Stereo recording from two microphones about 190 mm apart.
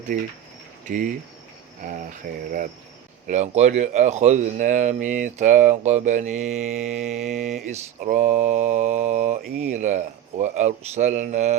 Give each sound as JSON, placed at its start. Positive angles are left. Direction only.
{"t": 0.1, "sound": "cricket", "side_deg": -45}
{"t": 3.2, "sound": "speech", "side_deg": -35}
{"t": 7.3, "sound": "mantra", "side_deg": -5}
{"t": 8.0, "sound": "speech", "side_deg": -40}